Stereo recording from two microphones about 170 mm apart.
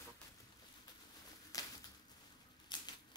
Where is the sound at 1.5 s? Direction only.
20° left (ahead or behind).